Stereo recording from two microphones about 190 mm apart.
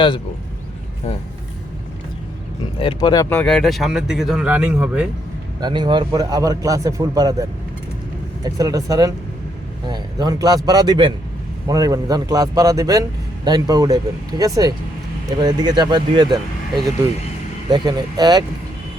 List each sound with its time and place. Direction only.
2.7 s speech: 30° left (ahead or behind)
3.2 s speech: 5° left (ahead or behind)
5.5 s a man's voice: 20° right (ahead or behind)
8.4 s a man's voice: 20° right (ahead or behind)
17.7 s a man's voice: 25° right (ahead or behind)